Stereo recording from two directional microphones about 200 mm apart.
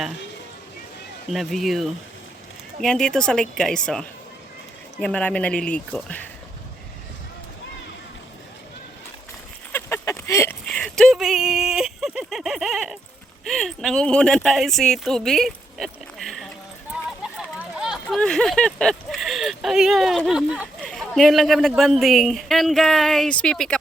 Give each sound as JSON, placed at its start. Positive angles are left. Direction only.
{"t": 1.3, "sound": "a woman's voice", "side_deg": 0}
{"t": 9.7, "sound": "a sound", "side_deg": 10}
{"t": 13.4, "sound": "speech", "side_deg": 0}
{"t": 17.6, "sound": "a woman's voice", "side_deg": -5}